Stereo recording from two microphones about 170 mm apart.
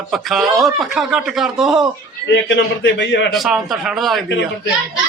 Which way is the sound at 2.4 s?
90° left.